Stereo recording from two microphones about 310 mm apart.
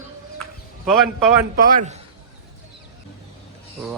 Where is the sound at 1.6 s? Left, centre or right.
Right.